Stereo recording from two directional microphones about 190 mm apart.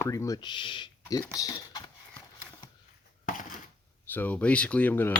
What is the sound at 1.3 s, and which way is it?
Typing, 20° left (ahead or behind).